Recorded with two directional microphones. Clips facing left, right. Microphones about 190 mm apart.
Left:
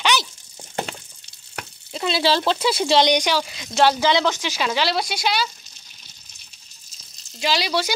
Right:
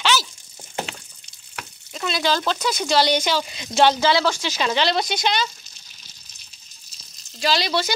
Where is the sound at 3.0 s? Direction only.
15° left (ahead or behind).